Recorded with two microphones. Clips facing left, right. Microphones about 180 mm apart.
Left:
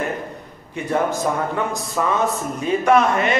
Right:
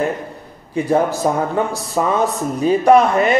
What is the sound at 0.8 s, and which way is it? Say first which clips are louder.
A man's voice: right 4 dB; 35° right (ahead or behind).